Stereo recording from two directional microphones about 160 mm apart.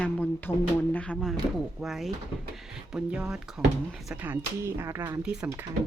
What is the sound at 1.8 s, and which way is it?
Speech, centre (ahead or behind).